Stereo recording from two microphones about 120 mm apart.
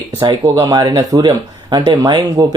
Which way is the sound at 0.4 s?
25° right (ahead or behind).